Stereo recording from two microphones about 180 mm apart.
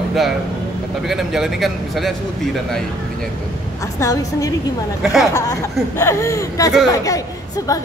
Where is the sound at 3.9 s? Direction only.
20° left (ahead or behind).